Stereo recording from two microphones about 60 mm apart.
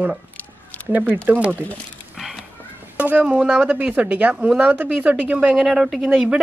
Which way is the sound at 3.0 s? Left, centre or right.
Right.